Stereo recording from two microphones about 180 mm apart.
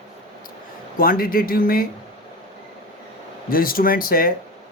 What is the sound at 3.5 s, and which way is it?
Speech, 55° left (ahead or behind).